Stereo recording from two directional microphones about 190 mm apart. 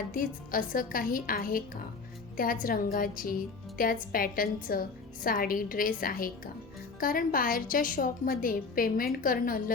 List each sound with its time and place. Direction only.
0.1 s a woman's voice: 45° left (ahead or behind)